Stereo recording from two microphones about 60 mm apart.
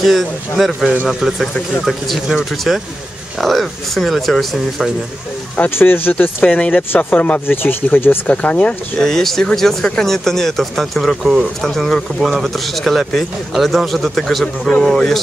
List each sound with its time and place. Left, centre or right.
0.0 s speech: centre
1.2 s speech: centre
5.7 s speech: left
6.2 s speech: left
8.3 s speech: left; by 15.1 s centre